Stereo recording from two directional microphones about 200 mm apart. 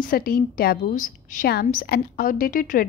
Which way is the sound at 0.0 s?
45° left (ahead or behind).